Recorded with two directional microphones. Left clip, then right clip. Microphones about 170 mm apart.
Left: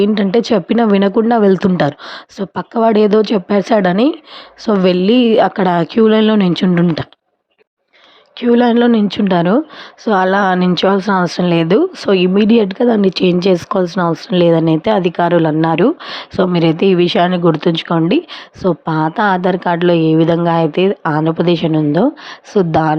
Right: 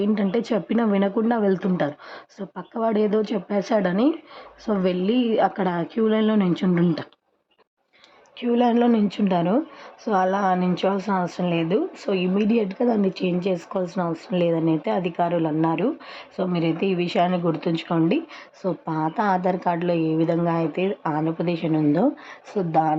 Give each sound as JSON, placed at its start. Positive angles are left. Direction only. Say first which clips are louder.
{"t": 0.0, "sound": "a woman's voice", "louder": "left 10 dB", "side_deg": 25}
{"t": 8.4, "sound": "a woman's voice", "louder": "left 9 dB", "side_deg": 30}